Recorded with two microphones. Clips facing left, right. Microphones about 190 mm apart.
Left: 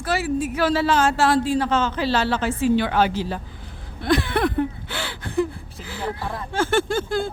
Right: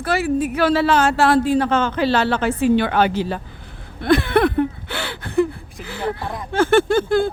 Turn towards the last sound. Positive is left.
turn(degrees=-60)  # may be behind; listen again after turning